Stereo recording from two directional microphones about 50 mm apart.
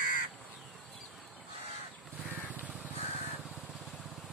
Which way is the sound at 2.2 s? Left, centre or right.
Right.